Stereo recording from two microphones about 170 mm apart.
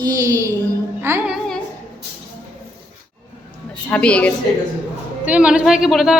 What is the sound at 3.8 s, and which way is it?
Speech, 5° left (ahead or behind).